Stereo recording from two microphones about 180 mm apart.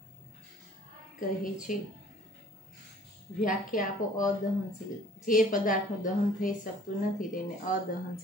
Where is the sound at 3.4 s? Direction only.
50° left (ahead or behind).